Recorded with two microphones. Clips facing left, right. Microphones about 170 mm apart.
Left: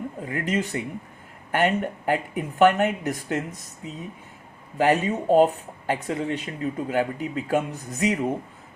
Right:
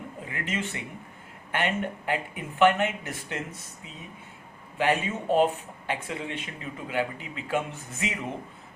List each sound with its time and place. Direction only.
0.3 s speech: 40° left (ahead or behind)
4.8 s speech: 40° left (ahead or behind)